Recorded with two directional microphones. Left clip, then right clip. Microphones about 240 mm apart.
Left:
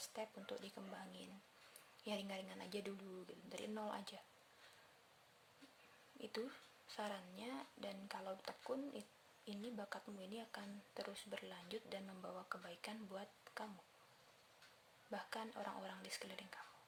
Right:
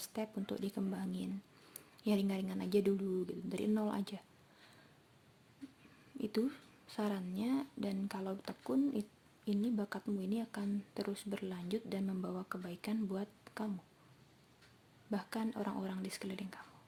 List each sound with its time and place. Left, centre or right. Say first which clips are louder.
0.0 s speech: right 7 dB; centre
6.2 s speech: right 10 dB; centre
15.1 s speech: right 7 dB; centre